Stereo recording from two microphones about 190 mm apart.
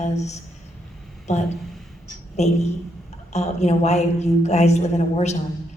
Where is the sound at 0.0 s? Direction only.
35° left (ahead or behind).